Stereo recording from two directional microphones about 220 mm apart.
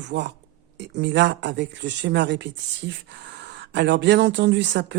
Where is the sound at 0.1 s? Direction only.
50° right (ahead or behind).